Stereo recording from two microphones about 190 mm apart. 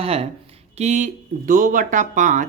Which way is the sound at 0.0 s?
30° right (ahead or behind).